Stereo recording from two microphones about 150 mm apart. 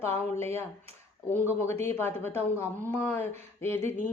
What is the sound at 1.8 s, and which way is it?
Speech, 15° left (ahead or behind).